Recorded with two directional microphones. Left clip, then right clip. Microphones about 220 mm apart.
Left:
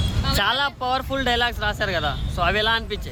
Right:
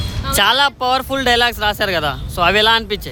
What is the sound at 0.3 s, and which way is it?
Speech, 40° right (ahead or behind).